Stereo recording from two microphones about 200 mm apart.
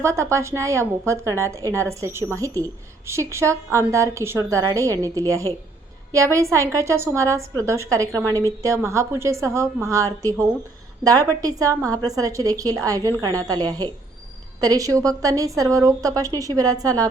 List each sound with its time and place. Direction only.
0.0 s a woman's voice: 15° right (ahead or behind)